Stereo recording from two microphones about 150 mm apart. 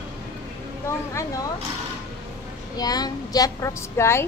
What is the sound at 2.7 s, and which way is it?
A woman's voice, 25° left (ahead or behind).